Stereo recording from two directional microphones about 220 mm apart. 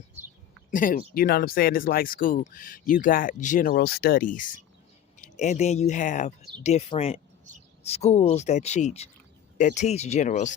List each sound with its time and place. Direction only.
0.7 s speech: 35° left (ahead or behind)